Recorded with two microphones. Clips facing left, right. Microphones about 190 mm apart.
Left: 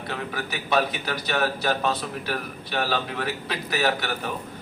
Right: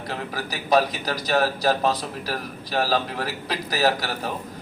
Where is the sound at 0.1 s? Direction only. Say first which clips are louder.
Even; 35° right (ahead or behind).